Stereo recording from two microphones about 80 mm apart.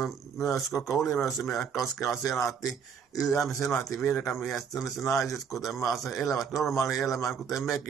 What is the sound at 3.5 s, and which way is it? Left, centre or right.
Speech, left.